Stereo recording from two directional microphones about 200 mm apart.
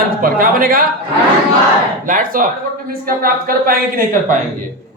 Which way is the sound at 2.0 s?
40° right (ahead or behind).